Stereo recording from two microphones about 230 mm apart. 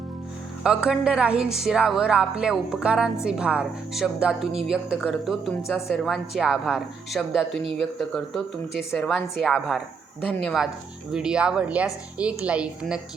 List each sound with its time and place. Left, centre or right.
0.6 s a woman's voice: centre